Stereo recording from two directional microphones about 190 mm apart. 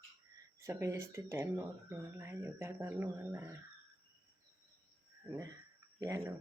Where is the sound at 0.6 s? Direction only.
15° right (ahead or behind).